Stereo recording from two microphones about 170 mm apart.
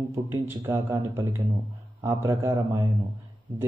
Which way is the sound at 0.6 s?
15° right (ahead or behind).